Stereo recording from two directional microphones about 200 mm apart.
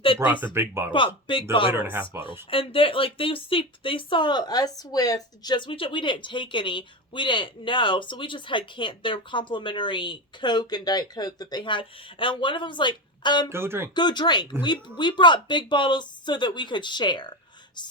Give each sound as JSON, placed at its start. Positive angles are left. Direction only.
{"t": 0.2, "sound": "speech", "side_deg": -10}
{"t": 0.9, "sound": "speech", "side_deg": 25}
{"t": 1.7, "sound": "speech", "side_deg": -10}
{"t": 2.5, "sound": "speech", "side_deg": 25}
{"t": 13.5, "sound": "speech", "side_deg": -10}
{"t": 13.9, "sound": "speech", "side_deg": 20}